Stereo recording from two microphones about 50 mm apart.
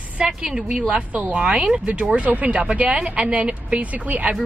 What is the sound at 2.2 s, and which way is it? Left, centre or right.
A woman's voice, right.